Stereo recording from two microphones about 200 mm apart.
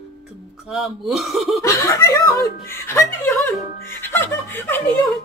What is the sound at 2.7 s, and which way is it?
Chuckle, 10° left (ahead or behind).